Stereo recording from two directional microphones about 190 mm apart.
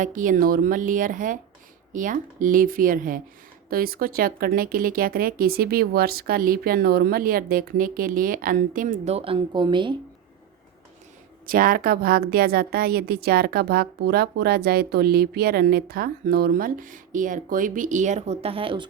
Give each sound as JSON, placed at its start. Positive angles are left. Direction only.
{"t": 0.0, "sound": "a woman's voice", "side_deg": -45}
{"t": 9.1, "sound": "speech", "side_deg": -30}
{"t": 11.4, "sound": "a woman's voice", "side_deg": -45}